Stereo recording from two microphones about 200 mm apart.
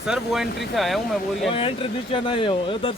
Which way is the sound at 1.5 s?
25° left (ahead or behind).